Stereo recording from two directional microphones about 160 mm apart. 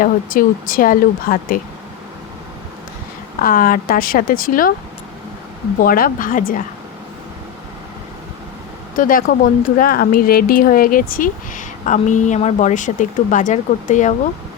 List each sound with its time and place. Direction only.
0.0 s speech: 60° left (ahead or behind)
3.4 s speech: 60° left (ahead or behind)
5.8 s speech: 65° left (ahead or behind)
9.0 s speech: 60° left (ahead or behind)